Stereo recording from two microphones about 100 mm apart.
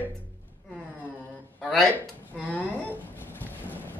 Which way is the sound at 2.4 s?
10° left (ahead or behind).